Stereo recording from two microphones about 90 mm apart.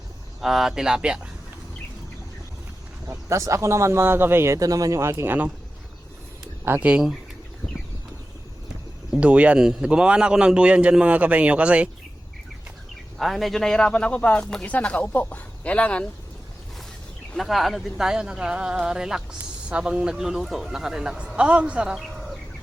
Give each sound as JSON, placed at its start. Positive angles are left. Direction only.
{"t": 0.4, "sound": "speech", "side_deg": -5}
{"t": 3.1, "sound": "speech", "side_deg": -35}
{"t": 6.7, "sound": "speech", "side_deg": -15}
{"t": 9.1, "sound": "speech", "side_deg": -15}
{"t": 13.1, "sound": "speech", "side_deg": 0}
{"t": 17.3, "sound": "speech", "side_deg": 0}